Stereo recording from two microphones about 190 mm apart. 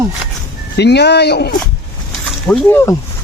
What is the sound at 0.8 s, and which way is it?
Speech, 60° left (ahead or behind).